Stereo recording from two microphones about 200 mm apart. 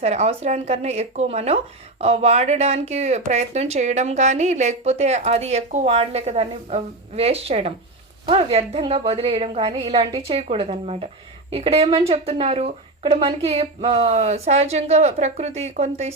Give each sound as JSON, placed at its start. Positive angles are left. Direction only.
{"t": 0.0, "sound": "a woman's voice", "side_deg": -30}